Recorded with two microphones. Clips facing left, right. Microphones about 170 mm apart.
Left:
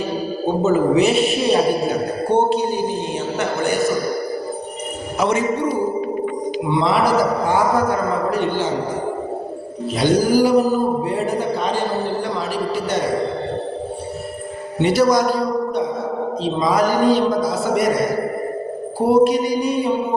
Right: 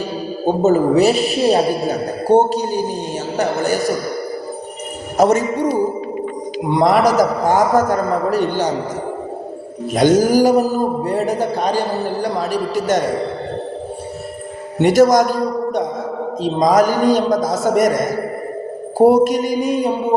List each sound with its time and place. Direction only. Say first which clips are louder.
0.4 s a woman's voice: right 3 dB; 40° right (ahead or behind)
5.1 s a man's voice: right 6 dB; 40° right (ahead or behind)
6.7 s a man's voice: right 4 dB; 45° right (ahead or behind)
9.9 s a man's voice: right 3 dB; 45° right (ahead or behind)
14.8 s a man's voice: right 4 dB; 45° right (ahead or behind)